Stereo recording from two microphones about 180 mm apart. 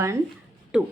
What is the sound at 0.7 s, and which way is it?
Speech, 5° right (ahead or behind).